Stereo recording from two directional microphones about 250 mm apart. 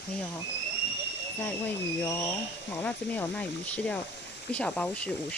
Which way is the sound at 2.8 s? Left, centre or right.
Centre.